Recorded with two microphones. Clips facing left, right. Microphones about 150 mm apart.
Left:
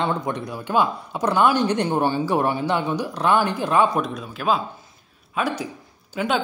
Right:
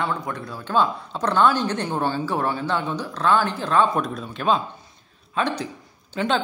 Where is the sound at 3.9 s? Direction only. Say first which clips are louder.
Left 1 dB; centre (ahead or behind).